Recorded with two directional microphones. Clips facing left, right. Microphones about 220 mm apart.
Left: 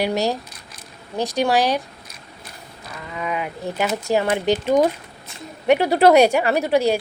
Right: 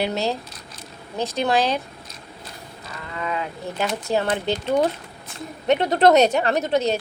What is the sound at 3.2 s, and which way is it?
Speech, 15° left (ahead or behind).